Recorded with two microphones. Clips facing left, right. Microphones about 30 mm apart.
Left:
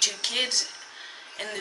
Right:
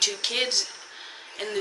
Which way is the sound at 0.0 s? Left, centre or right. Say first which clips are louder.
Right 1 dB; centre.